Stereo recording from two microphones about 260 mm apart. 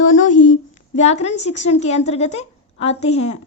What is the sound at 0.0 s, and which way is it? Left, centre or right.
Speech, left.